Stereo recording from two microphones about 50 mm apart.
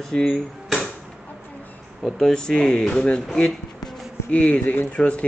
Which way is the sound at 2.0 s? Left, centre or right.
Centre.